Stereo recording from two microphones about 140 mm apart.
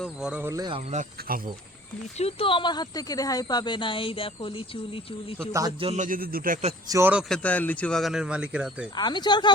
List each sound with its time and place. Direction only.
0.0 s speech: 5° right (ahead or behind)
0.9 s speech: 55° right (ahead or behind)
1.3 s speech: 90° right
2.1 s speech: 45° left (ahead or behind)
5.4 s a man's voice: 25° right (ahead or behind)
5.8 s speech: 50° right (ahead or behind)
6.1 s a man's voice: 90° right
6.8 s a man's voice: 25° right (ahead or behind)
7.3 s speech: 10° left (ahead or behind); by 8.9 s 5° right (ahead or behind)
9.0 s speech: 30° left (ahead or behind)